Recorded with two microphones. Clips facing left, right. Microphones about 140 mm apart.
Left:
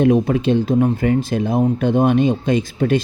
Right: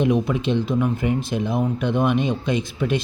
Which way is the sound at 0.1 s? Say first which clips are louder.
Left 5 dB; 45° left (ahead or behind).